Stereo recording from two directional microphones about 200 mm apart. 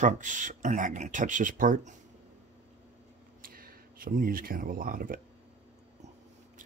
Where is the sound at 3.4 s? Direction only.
45° right (ahead or behind).